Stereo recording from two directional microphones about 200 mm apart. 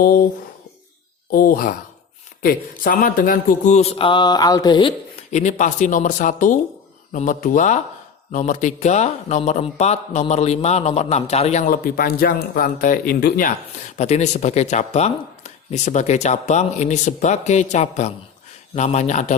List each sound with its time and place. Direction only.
1.3 s speech: 45° left (ahead or behind); by 4.9 s 25° left (ahead or behind)
5.3 s speech: 35° left (ahead or behind)
14.0 s speech: 35° left (ahead or behind)